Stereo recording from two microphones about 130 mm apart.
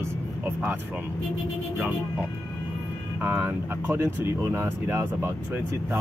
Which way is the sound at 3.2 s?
15° right (ahead or behind).